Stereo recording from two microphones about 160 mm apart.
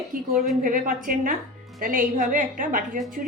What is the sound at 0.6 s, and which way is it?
A woman's voice, 60° right (ahead or behind).